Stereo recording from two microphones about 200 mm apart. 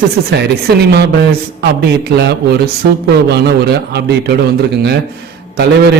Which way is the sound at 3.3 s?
55° right (ahead or behind).